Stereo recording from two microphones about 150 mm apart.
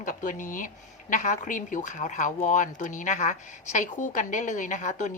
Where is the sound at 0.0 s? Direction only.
60° left (ahead or behind).